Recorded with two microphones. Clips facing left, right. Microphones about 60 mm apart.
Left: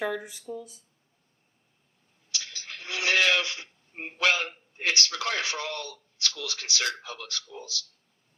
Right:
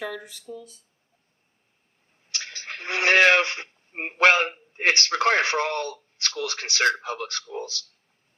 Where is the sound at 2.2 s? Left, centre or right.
Right.